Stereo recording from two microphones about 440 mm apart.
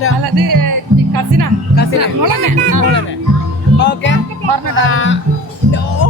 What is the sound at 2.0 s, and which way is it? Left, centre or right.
Speech, right.